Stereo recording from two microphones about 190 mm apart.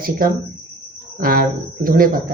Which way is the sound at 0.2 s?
50° right (ahead or behind).